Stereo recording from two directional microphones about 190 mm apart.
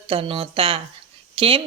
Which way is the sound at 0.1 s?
30° right (ahead or behind).